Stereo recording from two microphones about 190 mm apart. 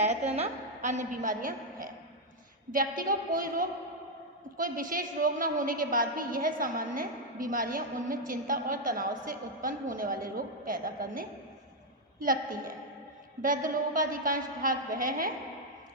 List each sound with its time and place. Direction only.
0.0 s a woman's voice: 35° right (ahead or behind)